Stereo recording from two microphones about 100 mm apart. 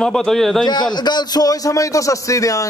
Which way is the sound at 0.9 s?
45° left (ahead or behind).